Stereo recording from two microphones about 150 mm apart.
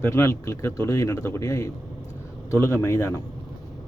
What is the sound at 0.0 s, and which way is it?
Speech, 20° left (ahead or behind).